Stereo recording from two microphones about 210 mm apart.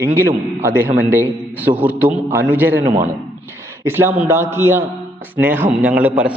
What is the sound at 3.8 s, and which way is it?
A man's voice, 10° right (ahead or behind).